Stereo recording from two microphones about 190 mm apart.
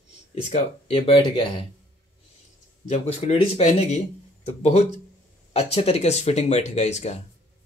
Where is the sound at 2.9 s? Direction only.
35° left (ahead or behind).